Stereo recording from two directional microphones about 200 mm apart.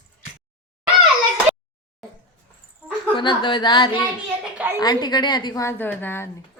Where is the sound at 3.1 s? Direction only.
25° left (ahead or behind).